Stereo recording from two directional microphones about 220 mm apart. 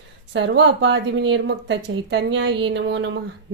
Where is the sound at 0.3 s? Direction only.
55° right (ahead or behind).